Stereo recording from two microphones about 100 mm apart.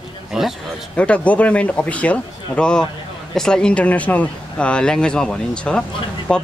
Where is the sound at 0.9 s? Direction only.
10° left (ahead or behind).